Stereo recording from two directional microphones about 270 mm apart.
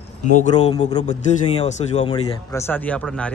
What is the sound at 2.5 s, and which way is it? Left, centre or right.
Speech, centre.